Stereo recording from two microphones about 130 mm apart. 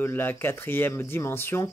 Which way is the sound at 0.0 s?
15° left (ahead or behind).